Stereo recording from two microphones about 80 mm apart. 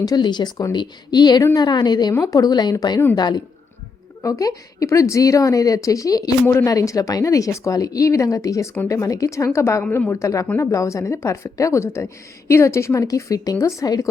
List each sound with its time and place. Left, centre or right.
0.0 s a woman's voice: left
4.2 s a woman's voice: left